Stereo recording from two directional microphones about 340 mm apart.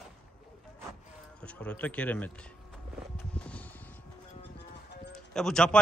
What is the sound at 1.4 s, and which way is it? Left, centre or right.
Speech, centre.